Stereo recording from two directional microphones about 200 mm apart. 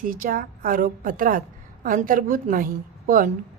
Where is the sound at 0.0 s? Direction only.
45° right (ahead or behind).